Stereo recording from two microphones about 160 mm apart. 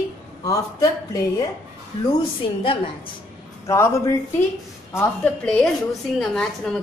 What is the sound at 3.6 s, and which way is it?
Speech, 20° left (ahead or behind).